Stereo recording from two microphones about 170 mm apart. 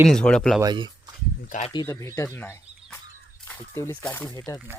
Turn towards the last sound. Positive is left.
turn(degrees=10)  # may be behind; listen again after turning